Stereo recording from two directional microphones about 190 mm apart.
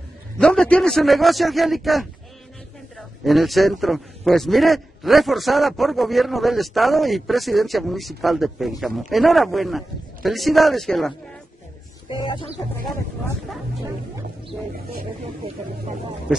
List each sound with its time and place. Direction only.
0.4 s a man's voice: 5° left (ahead or behind)
12.1 s speech: 25° left (ahead or behind)
16.3 s a man's voice: 5° right (ahead or behind)